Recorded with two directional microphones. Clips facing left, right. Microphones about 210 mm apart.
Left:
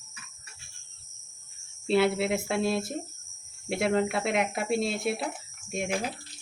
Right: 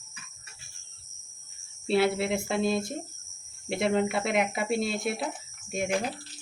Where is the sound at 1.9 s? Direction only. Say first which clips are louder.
Left 1 dB; centre (ahead or behind).